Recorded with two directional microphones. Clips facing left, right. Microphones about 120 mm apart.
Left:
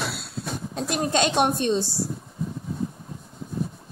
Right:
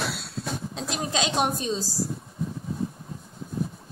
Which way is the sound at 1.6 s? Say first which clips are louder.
Left 6 dB; 65° left (ahead or behind).